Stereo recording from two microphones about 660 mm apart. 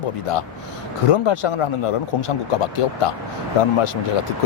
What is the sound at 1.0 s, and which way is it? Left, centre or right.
Speech, left.